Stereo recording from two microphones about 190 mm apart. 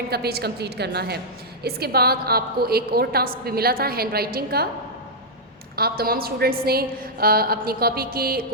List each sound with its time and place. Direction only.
0.1 s a woman's voice: 55° right (ahead or behind)
5.7 s a woman's voice: 55° right (ahead or behind)